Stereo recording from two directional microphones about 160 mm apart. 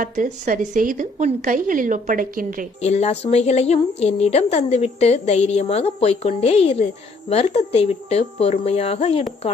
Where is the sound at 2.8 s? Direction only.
45° left (ahead or behind).